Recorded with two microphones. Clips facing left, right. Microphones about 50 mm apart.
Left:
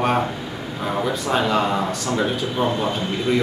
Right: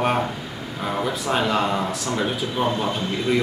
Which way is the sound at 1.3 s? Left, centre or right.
Centre.